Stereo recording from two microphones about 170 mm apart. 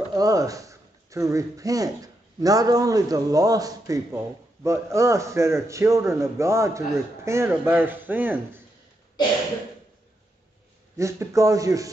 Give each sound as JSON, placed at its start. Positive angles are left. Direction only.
{"t": 0.1, "sound": "a man's voice", "side_deg": -20}
{"t": 11.0, "sound": "a man's voice", "side_deg": -15}